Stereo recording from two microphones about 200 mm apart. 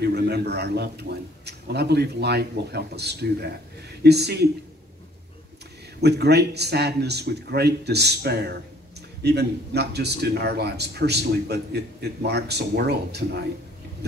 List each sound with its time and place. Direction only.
0.0 s a man's voice: 55° right (ahead or behind)
5.9 s a man's voice: 55° right (ahead or behind)